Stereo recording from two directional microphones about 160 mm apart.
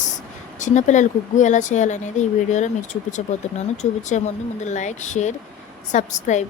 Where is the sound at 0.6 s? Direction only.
50° left (ahead or behind).